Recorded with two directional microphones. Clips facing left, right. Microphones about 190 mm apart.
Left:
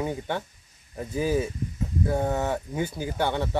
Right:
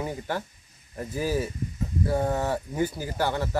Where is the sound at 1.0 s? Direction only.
5° right (ahead or behind).